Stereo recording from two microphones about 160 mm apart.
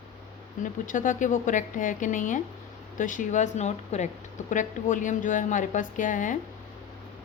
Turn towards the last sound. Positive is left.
turn(degrees=55)  # may be behind; listen again after turning